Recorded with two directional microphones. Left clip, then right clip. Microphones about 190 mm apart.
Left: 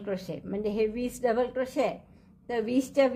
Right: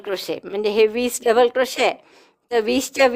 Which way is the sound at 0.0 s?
50° right (ahead or behind).